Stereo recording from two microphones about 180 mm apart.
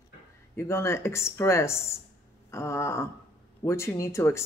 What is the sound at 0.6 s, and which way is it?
Speech, 15° left (ahead or behind).